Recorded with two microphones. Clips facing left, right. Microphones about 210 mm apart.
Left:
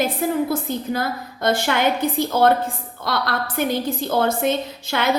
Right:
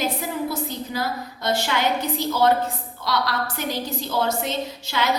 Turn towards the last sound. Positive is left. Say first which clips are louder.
# left 3 dB
turn(degrees=55)  # may be behind; listen again after turning